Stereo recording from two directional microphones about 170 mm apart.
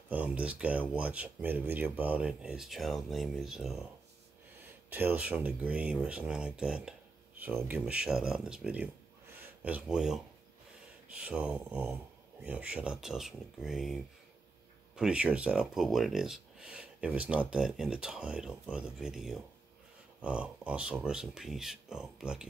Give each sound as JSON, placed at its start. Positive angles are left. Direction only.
{"t": 0.1, "sound": "speech", "side_deg": -10}
{"t": 4.8, "sound": "speech", "side_deg": -10}